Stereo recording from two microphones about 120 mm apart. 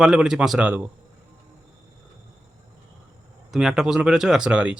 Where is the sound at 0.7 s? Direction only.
15° right (ahead or behind).